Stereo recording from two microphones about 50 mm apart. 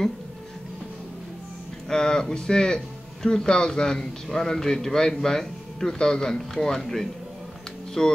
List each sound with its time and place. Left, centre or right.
1.9 s speech: centre